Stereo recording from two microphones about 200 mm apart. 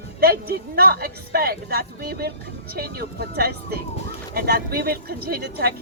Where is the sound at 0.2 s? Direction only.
50° right (ahead or behind).